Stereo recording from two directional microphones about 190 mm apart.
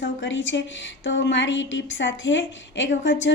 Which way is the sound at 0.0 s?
75° left (ahead or behind).